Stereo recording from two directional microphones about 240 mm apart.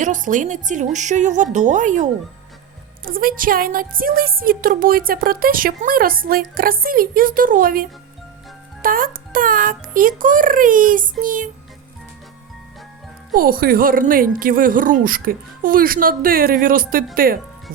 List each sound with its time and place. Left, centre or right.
0.0 s speech: right
13.3 s speech: right